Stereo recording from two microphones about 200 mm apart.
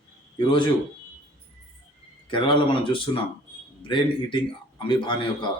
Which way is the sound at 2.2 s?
25° left (ahead or behind).